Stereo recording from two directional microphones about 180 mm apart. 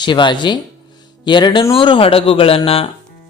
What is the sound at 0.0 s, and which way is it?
Speech, 25° left (ahead or behind).